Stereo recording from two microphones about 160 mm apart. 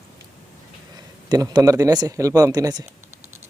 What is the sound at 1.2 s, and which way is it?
A man's voice, 25° right (ahead or behind).